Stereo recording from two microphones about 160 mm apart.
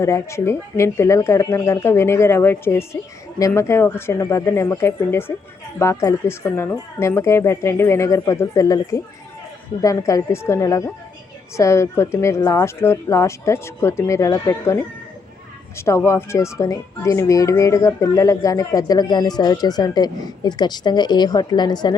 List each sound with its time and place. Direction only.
0.0 s speech: 15° left (ahead or behind)